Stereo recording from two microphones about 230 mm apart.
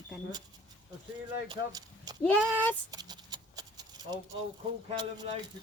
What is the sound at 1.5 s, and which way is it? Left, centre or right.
Speech, centre.